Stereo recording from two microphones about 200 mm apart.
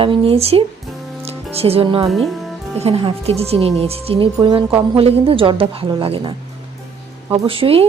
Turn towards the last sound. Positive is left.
turn(degrees=-30)  # may be behind; listen again after turning